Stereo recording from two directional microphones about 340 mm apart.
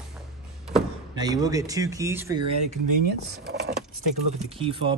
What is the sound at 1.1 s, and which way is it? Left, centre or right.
Speech, centre.